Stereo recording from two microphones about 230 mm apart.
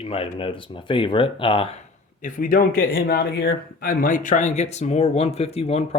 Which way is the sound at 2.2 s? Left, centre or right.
Left.